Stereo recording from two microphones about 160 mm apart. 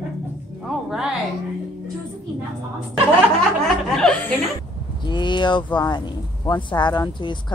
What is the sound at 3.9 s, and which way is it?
Speech, 5° left (ahead or behind).